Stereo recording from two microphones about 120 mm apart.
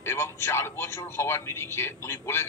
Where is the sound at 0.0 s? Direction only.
20° left (ahead or behind).